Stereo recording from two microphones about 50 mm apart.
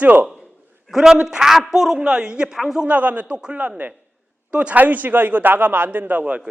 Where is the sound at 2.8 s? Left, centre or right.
Right.